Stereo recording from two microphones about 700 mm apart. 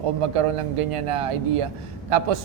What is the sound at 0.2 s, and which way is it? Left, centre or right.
A man's voice, right.